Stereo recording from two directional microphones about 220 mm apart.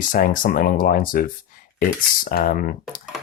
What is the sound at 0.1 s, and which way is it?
Speech, 40° left (ahead or behind).